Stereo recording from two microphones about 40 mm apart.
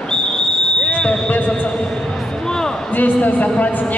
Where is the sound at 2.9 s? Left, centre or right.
Left.